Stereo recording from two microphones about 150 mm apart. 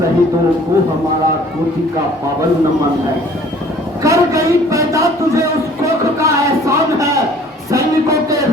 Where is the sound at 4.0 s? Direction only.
20° right (ahead or behind).